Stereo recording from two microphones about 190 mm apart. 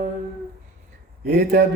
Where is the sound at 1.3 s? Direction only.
55° right (ahead or behind).